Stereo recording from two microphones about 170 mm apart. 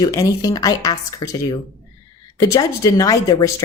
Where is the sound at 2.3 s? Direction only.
20° left (ahead or behind).